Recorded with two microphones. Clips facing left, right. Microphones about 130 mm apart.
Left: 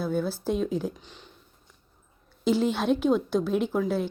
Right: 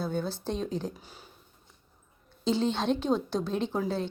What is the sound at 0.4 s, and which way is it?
Speech, 5° left (ahead or behind).